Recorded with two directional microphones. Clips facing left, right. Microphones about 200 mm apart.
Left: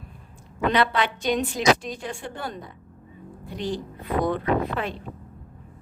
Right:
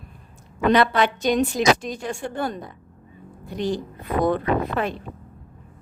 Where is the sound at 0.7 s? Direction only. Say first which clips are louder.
Right 5 dB; 45° right (ahead or behind).